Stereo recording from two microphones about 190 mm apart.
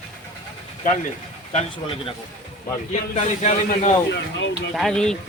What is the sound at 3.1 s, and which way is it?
Speech, 40° left (ahead or behind).